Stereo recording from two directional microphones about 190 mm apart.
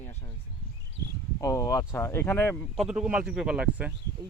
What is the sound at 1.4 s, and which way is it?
Speech, 15° left (ahead or behind).